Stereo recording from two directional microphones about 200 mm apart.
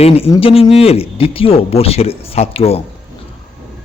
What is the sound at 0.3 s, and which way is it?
A man's voice, 30° left (ahead or behind).